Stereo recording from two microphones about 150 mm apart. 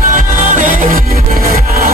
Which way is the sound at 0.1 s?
60° right (ahead or behind).